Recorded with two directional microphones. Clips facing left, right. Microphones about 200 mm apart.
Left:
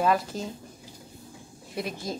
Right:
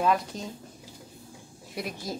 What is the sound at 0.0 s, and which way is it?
Speech, centre (ahead or behind).